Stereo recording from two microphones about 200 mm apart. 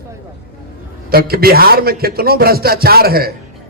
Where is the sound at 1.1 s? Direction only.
50° right (ahead or behind).